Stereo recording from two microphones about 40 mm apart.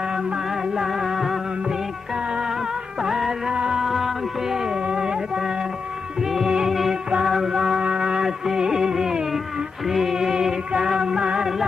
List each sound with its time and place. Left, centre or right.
0.1 s music: centre
3.0 s music: centre
3.5 s music: right
3.8 s music: centre